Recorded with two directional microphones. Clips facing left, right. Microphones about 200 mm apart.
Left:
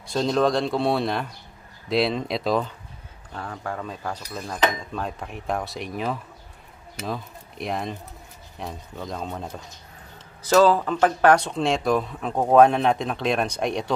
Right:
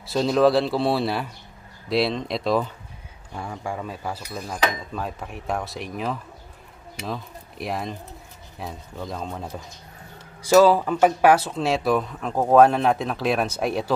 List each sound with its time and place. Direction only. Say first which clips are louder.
0.1 s speech: right 3 dB; 5° right (ahead or behind)